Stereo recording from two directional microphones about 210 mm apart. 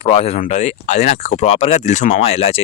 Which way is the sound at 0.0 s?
30° left (ahead or behind).